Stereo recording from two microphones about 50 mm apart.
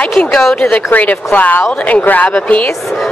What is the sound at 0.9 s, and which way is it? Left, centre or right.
A woman's voice, left.